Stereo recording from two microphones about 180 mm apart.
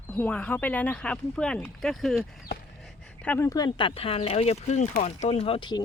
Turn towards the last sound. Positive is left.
turn(degrees=30)  # may be behind; listen again after turning